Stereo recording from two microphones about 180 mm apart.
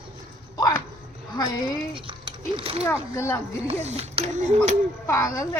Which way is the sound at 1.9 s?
30° right (ahead or behind).